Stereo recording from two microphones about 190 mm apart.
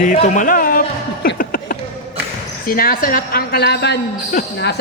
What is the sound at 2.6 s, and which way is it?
A woman's voice, 50° left (ahead or behind).